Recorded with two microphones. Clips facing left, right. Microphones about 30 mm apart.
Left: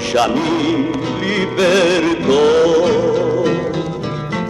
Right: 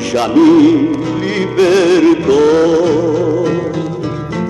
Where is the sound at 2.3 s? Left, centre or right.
Left.